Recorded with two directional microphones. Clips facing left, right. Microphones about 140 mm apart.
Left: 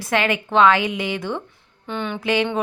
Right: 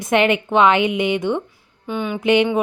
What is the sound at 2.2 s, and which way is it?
Speech, 20° right (ahead or behind).